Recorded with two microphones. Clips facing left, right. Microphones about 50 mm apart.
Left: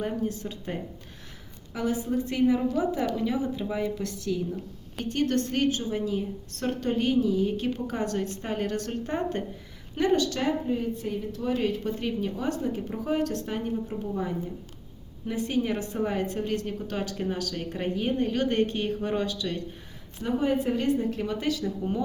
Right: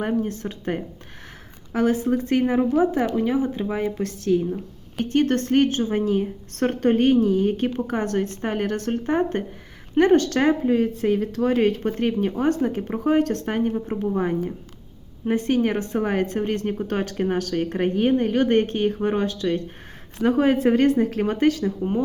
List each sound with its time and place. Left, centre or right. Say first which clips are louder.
0.1 s a woman's voice: right 6 dB; right
9.9 s speech: right 8 dB; right
11.6 s a woman's voice: right 7 dB; right
20.1 s speech: right 7 dB; right